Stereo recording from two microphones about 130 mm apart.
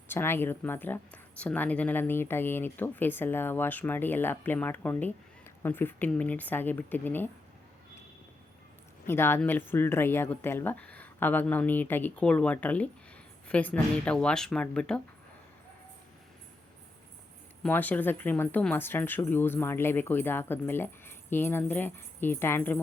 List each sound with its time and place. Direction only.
0.1 s speech: 20° left (ahead or behind)
9.0 s speech: 20° left (ahead or behind)
17.6 s speech: 15° left (ahead or behind)